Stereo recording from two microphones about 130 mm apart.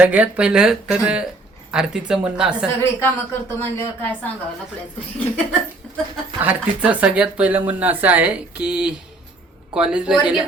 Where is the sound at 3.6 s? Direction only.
15° left (ahead or behind).